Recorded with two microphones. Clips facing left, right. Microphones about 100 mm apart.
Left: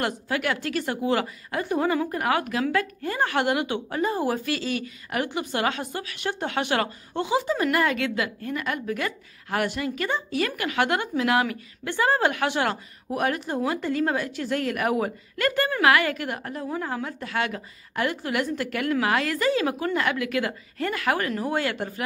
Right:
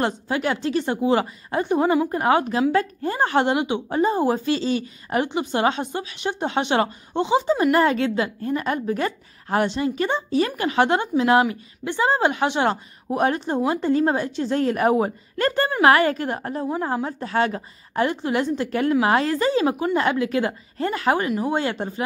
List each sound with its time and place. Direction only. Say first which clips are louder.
0.0 s a woman's voice: right 4 dB; 25° right (ahead or behind)